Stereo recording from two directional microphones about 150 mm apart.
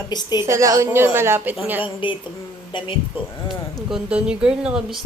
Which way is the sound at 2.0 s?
35° left (ahead or behind).